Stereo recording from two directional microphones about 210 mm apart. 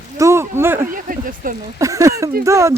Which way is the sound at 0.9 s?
40° right (ahead or behind).